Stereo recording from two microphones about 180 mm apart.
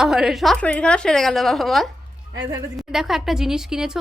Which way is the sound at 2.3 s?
20° right (ahead or behind).